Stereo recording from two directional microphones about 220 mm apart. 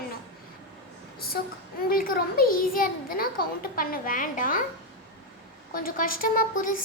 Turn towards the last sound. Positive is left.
turn(degrees=40)  # may be behind; listen again after turning